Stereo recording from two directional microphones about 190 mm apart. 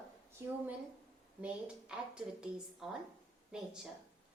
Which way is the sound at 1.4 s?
5° right (ahead or behind).